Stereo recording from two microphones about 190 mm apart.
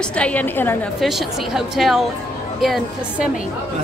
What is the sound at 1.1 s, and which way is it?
Speech, centre (ahead or behind).